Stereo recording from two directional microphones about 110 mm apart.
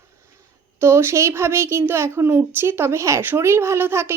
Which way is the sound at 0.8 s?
20° right (ahead or behind).